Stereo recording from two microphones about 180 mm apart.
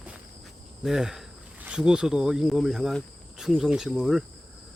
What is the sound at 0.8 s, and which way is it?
Speech, 5° right (ahead or behind).